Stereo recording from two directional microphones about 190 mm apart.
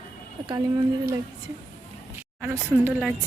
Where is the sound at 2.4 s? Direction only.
10° right (ahead or behind).